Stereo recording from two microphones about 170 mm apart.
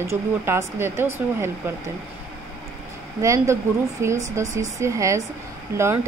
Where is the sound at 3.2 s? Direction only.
15° right (ahead or behind).